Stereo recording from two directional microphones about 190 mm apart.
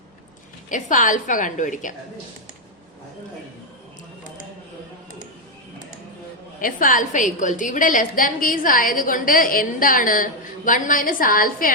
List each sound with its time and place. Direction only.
0.7 s a woman's voice: 45° left (ahead or behind)
6.6 s a woman's voice: 45° left (ahead or behind)